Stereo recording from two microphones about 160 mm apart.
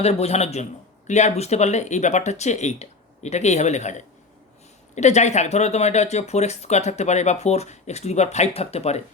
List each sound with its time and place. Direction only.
0.0 s speech: 40° left (ahead or behind)